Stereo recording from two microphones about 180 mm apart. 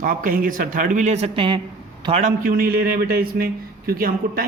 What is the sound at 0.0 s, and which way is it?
A man's voice, 50° right (ahead or behind).